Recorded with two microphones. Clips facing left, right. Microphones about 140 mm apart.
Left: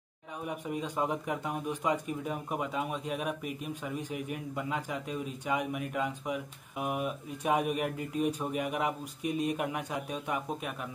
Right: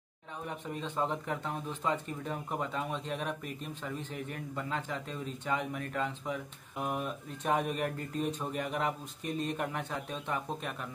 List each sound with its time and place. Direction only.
0.5 s speech: 10° left (ahead or behind)